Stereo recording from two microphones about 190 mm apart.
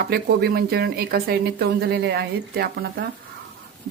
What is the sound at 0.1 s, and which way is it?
Speech, 60° right (ahead or behind).